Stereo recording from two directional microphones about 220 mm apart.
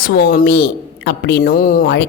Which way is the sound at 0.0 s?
45° left (ahead or behind).